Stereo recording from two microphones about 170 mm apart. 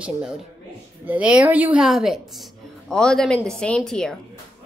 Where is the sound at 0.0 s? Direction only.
5° right (ahead or behind).